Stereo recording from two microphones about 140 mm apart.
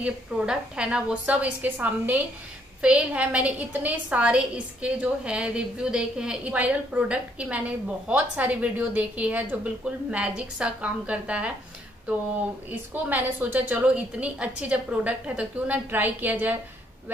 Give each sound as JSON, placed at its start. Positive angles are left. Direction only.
{"t": 0.0, "sound": "a woman's voice", "side_deg": -5}
{"t": 12.6, "sound": "a woman's voice", "side_deg": -10}